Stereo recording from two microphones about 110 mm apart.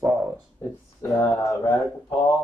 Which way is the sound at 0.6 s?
20° left (ahead or behind).